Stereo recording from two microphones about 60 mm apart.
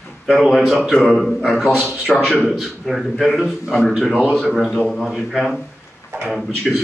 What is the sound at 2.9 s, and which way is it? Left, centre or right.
A man's voice, centre.